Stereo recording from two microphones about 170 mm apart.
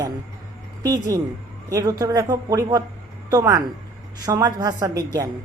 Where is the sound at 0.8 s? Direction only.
20° right (ahead or behind).